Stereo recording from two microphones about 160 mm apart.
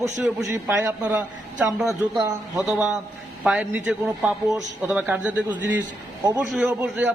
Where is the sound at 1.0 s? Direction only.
10° right (ahead or behind).